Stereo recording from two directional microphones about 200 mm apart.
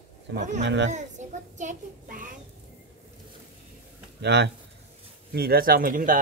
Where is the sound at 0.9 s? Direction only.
35° right (ahead or behind).